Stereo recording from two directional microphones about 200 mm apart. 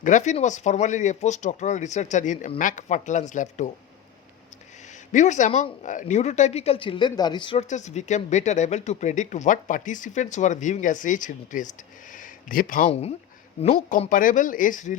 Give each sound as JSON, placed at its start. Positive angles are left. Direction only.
{"t": 0.0, "sound": "speech", "side_deg": 40}
{"t": 4.9, "sound": "speech", "side_deg": 35}
{"t": 7.7, "sound": "speech", "side_deg": 35}